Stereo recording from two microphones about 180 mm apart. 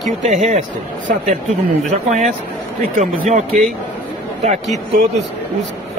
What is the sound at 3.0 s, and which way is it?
Speech, 40° right (ahead or behind).